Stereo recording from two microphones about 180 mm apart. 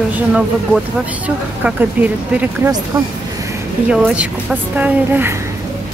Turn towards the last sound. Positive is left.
turn(degrees=-10)  # may be behind; listen again after turning